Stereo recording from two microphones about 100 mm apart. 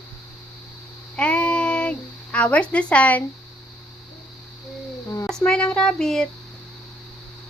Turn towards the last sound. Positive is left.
turn(degrees=5)  # may be behind; listen again after turning